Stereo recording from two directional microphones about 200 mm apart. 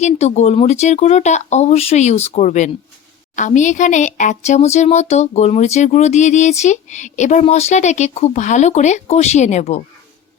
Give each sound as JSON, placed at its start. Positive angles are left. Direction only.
{"t": 0.0, "sound": "speech", "side_deg": 35}